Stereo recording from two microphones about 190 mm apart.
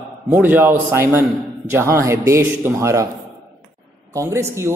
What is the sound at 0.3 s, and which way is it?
A man's voice, 10° right (ahead or behind).